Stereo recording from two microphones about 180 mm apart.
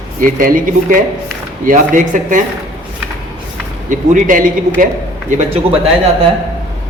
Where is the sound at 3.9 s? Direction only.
50° right (ahead or behind).